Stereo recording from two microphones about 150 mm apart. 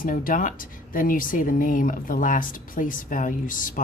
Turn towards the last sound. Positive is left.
turn(degrees=65)  # may be behind; listen again after turning